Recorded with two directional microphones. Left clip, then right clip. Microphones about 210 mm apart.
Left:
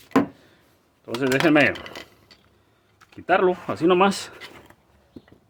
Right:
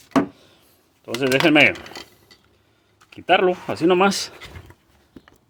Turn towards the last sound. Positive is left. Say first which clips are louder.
# right 1 dB
turn(degrees=-10)  # may be behind; listen again after turning